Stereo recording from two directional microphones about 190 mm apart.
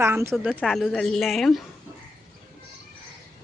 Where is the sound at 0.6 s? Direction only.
Centre (ahead or behind).